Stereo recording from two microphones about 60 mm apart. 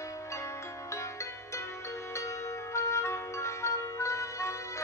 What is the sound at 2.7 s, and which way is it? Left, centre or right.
Marimba, left.